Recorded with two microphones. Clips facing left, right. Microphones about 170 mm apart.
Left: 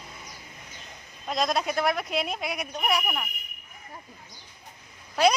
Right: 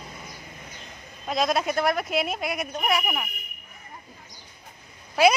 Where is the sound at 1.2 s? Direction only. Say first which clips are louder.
Right 2 dB; centre (ahead or behind).